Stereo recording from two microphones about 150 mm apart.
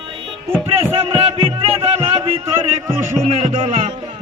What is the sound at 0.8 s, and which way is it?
Music, 40° right (ahead or behind).